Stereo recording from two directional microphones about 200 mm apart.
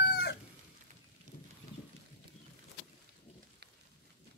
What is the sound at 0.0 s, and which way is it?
Chicken, 50° left (ahead or behind).